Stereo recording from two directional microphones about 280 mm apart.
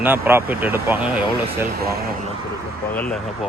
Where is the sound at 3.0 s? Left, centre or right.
Centre.